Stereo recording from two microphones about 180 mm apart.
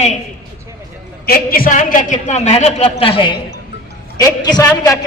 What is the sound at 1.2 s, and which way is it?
A woman's voice, 55° left (ahead or behind).